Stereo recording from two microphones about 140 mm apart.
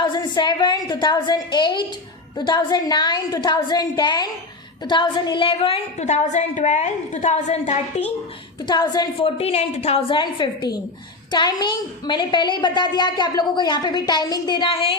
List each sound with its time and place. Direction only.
0.0 s a woman's voice: 30° left (ahead or behind); by 8.0 s 55° left (ahead or behind)
8.6 s a woman's voice: 30° left (ahead or behind)
9.1 s a woman's voice: 45° left (ahead or behind)